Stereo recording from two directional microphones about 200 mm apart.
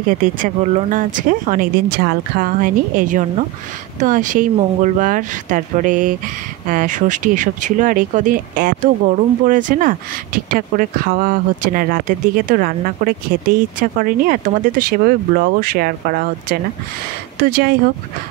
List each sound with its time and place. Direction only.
0.2 s speech: 40° right (ahead or behind)